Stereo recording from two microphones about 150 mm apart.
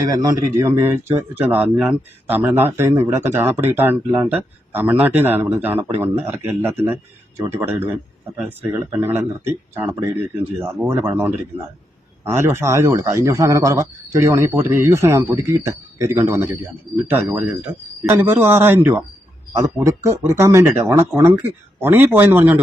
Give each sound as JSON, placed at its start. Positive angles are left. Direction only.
{"t": 0.1, "sound": "speech", "side_deg": -25}